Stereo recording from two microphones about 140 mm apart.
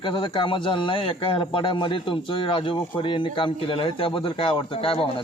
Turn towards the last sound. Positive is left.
turn(degrees=40)  # may be behind; listen again after turning